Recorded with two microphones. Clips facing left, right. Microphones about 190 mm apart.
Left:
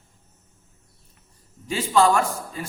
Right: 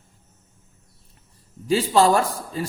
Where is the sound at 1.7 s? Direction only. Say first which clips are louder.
Right 2 dB; 35° right (ahead or behind).